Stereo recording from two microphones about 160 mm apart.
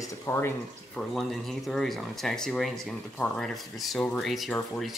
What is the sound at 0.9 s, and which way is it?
Speech, centre (ahead or behind).